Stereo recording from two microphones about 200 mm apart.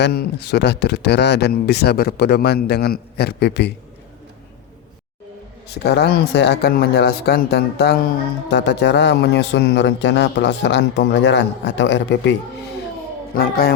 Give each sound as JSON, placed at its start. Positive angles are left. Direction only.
{"t": 0.0, "sound": "a man's voice", "side_deg": 55}
{"t": 5.6, "sound": "a man's voice", "side_deg": 55}
{"t": 13.3, "sound": "speech", "side_deg": 50}